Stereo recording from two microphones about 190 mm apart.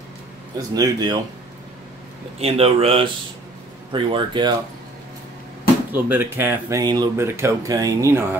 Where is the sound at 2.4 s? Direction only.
30° right (ahead or behind).